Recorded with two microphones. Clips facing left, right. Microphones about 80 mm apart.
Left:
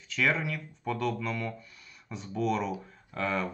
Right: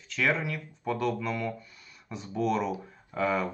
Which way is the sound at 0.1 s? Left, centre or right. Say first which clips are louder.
Right 1 dB; centre.